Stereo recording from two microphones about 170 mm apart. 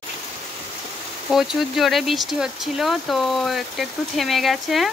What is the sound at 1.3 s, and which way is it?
Speech, centre (ahead or behind).